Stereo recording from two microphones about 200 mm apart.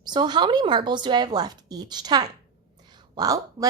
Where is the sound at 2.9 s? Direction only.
20° right (ahead or behind).